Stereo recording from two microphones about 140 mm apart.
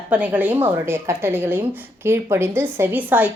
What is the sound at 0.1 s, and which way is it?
Speech, 10° right (ahead or behind).